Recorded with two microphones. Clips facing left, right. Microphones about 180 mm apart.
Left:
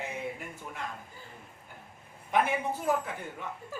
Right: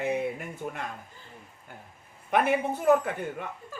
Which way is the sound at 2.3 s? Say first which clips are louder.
Right 3 dB; 60° right (ahead or behind).